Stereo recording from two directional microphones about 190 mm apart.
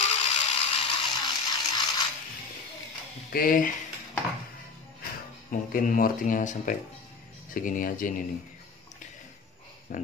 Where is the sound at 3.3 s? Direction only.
50° left (ahead or behind).